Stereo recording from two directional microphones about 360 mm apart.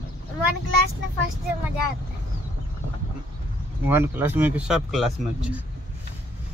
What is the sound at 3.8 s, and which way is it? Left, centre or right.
A man's voice, centre.